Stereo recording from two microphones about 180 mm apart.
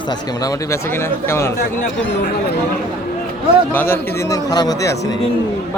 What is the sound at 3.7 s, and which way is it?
Speech, 10° left (ahead or behind).